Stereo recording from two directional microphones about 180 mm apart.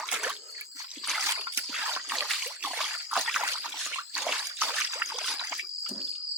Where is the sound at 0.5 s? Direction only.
20° right (ahead or behind).